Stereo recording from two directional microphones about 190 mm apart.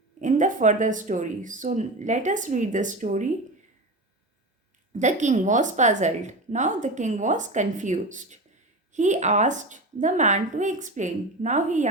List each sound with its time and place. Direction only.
0.2 s a woman's voice: 40° right (ahead or behind)
4.9 s a woman's voice: 40° right (ahead or behind)